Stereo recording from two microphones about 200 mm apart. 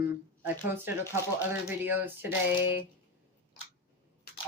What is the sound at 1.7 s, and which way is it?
Speech, 10° right (ahead or behind).